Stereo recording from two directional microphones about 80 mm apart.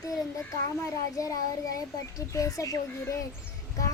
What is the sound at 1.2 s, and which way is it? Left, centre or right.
A child's voice, left.